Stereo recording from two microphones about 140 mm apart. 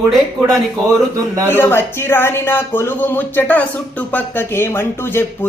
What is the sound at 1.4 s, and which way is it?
Speech, 15° left (ahead or behind).